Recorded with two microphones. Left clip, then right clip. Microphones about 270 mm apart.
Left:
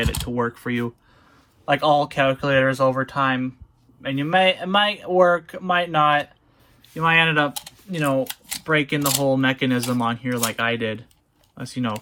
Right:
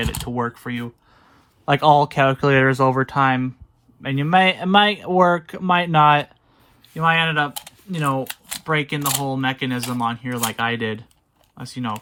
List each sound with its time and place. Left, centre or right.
0.0 s speech: centre
1.6 s speech: right
6.8 s speech: centre